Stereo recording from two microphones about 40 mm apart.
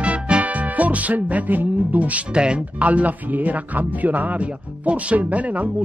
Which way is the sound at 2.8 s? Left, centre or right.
Right.